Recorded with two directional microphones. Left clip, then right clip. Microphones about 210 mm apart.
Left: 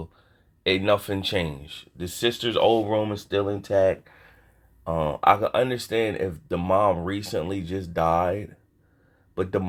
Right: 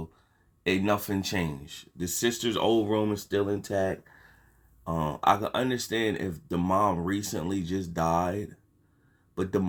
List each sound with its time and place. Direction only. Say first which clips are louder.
0.7 s speech: left 5 dB; 25° left (ahead or behind)